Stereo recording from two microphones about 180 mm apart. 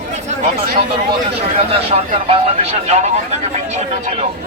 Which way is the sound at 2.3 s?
35° right (ahead or behind).